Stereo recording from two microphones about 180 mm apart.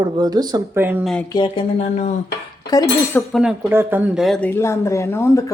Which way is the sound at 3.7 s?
10° right (ahead or behind).